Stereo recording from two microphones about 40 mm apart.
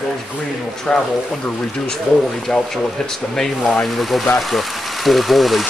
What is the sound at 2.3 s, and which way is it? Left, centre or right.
Speech, centre.